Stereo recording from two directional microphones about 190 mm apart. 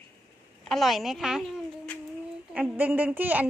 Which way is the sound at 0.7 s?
Centre (ahead or behind).